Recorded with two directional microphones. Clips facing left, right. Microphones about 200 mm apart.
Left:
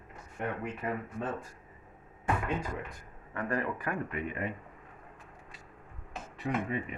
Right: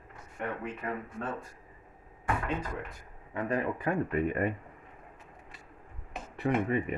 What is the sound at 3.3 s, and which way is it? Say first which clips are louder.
Speech: right 2 dB; 20° right (ahead or behind).